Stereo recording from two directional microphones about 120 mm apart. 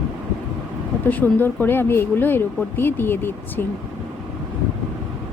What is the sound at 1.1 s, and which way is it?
Speech, 15° left (ahead or behind).